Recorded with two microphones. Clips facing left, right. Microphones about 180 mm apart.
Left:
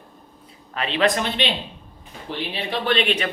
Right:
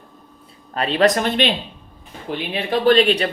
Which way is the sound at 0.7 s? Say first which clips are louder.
Right 4 dB; 40° right (ahead or behind).